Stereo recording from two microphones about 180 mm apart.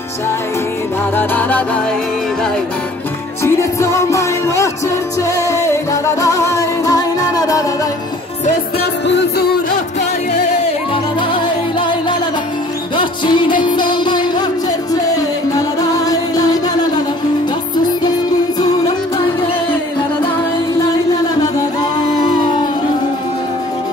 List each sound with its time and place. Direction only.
1.1 s music: 10° left (ahead or behind)
3.4 s music: 15° left (ahead or behind)
8.7 s music: 75° left (ahead or behind)
11.3 s music: 25° left (ahead or behind)
16.1 s music: 20° left (ahead or behind)